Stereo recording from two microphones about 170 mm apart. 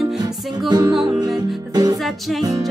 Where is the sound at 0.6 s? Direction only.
25° right (ahead or behind).